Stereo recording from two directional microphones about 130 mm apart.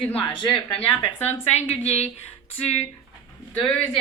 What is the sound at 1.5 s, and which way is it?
Speech, 55° left (ahead or behind).